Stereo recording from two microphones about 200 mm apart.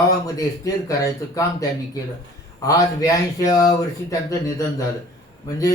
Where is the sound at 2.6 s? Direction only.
15° left (ahead or behind).